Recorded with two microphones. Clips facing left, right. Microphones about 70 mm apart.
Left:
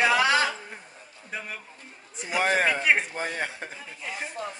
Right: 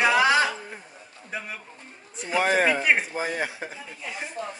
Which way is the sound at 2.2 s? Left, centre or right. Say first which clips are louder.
Right 2 dB; centre.